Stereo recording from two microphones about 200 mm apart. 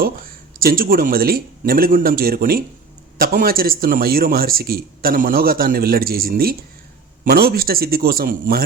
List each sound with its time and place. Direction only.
0.6 s speech: 45° right (ahead or behind)